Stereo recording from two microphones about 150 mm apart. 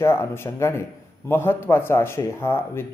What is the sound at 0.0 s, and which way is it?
A man's voice, 15° left (ahead or behind).